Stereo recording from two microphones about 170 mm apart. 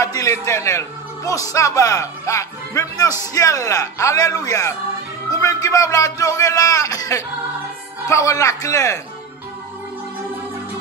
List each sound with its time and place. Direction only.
0.0 s a man's voice: 20° left (ahead or behind)